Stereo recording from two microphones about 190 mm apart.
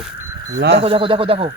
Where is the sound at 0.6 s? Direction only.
65° right (ahead or behind).